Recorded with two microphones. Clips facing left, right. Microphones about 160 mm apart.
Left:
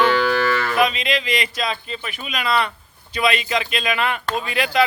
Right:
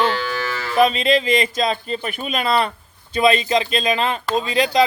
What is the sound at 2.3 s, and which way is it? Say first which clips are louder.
Speech: right 2 dB; 30° right (ahead or behind).